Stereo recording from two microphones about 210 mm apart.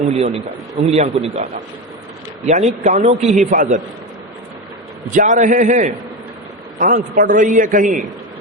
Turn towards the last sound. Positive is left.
turn(degrees=-40)  # may be behind; listen again after turning